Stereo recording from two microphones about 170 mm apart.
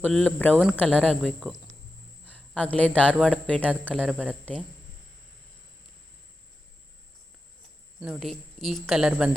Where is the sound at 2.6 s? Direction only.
10° left (ahead or behind).